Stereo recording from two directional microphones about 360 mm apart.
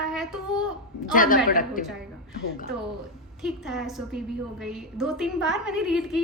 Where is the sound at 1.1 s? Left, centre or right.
Left.